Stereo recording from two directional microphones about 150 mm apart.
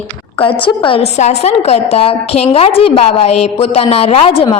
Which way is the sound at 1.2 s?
45° left (ahead or behind).